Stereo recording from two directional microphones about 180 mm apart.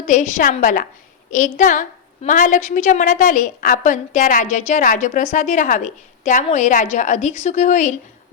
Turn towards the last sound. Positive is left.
turn(degrees=45)  # may be behind; listen again after turning